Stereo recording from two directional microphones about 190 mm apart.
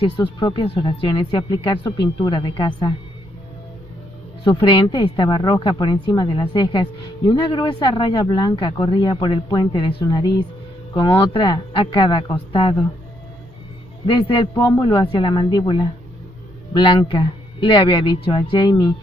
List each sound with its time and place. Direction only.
0.2 s speech: 25° left (ahead or behind)
4.5 s speech: 25° left (ahead or behind)
14.0 s speech: 25° left (ahead or behind)